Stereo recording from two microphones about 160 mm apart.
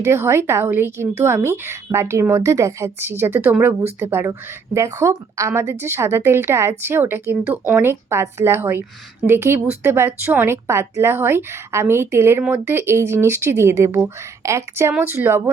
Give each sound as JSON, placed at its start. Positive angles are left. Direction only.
{"t": 0.0, "sound": "a woman's voice", "side_deg": -15}